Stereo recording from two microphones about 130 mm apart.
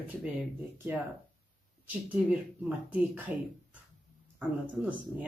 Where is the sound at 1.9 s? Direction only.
10° right (ahead or behind).